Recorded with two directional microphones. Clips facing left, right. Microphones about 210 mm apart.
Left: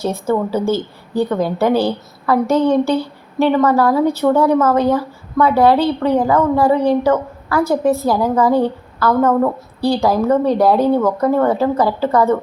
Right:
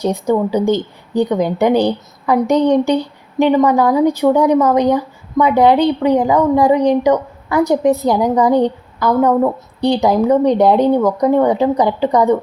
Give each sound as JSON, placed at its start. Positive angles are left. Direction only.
{"t": 0.0, "sound": "a woman's voice", "side_deg": -15}